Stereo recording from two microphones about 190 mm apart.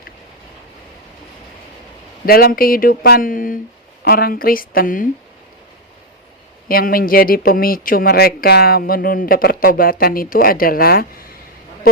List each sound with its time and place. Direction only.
2.2 s speech: 50° left (ahead or behind)
6.7 s speech: 50° left (ahead or behind)